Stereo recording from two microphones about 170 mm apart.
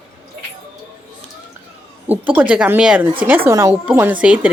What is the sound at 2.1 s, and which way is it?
Speech, 10° right (ahead or behind).